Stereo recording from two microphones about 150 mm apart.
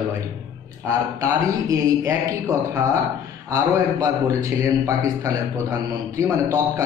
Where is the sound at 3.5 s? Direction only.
20° right (ahead or behind).